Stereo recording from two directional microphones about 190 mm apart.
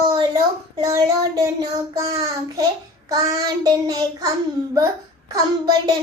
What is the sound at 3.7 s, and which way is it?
Child singing, 20° right (ahead or behind).